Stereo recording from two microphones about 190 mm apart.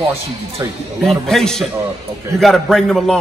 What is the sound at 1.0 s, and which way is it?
A man's voice, centre (ahead or behind).